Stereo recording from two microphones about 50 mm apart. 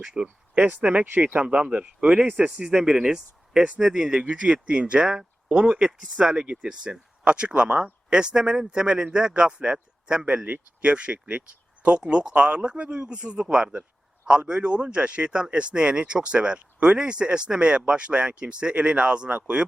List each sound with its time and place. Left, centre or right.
0.0 s speech: centre
0.5 s speech: right